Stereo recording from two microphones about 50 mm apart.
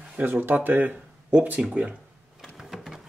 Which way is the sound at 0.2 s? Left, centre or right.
Right.